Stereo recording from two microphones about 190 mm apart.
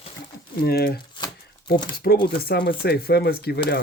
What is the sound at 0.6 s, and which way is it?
Speech, 55° left (ahead or behind).